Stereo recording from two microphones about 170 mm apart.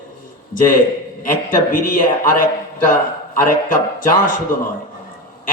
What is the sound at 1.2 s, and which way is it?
Speech, 55° left (ahead or behind).